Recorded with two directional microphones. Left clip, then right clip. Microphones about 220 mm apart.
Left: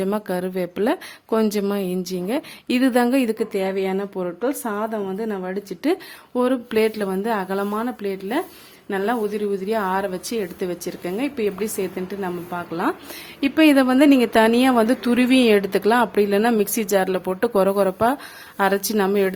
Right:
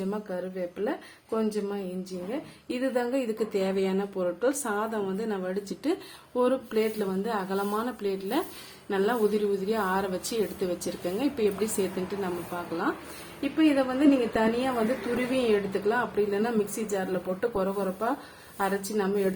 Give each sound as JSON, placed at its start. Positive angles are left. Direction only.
{"t": 0.1, "sound": "speech", "side_deg": 50}
{"t": 13.4, "sound": "speech", "side_deg": 50}